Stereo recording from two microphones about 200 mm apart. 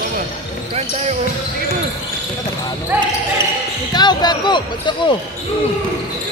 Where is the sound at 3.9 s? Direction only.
20° left (ahead or behind).